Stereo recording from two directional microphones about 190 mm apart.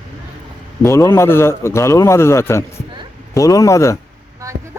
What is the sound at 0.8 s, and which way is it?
A man's voice, 15° left (ahead or behind).